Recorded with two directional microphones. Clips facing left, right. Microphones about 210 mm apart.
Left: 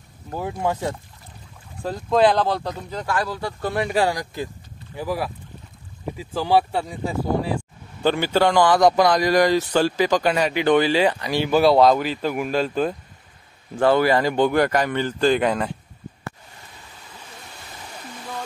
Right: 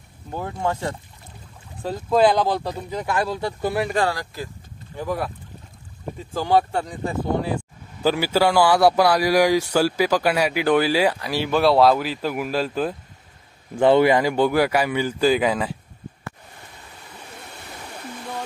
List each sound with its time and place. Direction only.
0.3 s speech: 10° left (ahead or behind)
1.8 s a man's voice: 5° right (ahead or behind)
3.1 s speech: 20° right (ahead or behind)
3.9 s speech: 15° left (ahead or behind)
4.9 s speech: 5° left (ahead or behind)
6.4 s speech: 5° left (ahead or behind)
8.0 s a man's voice: 5° right (ahead or behind)
13.7 s a man's voice: 20° right (ahead or behind); by 15.7 s 5° right (ahead or behind)
17.5 s waterfall: 60° right (ahead or behind)